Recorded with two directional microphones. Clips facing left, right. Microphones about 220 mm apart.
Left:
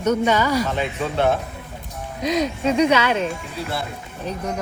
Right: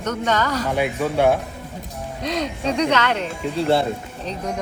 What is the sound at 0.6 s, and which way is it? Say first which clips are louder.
Speech: right 3 dB; 10° right (ahead or behind).